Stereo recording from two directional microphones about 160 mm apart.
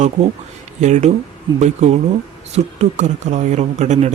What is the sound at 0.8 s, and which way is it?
Speech, 45° right (ahead or behind).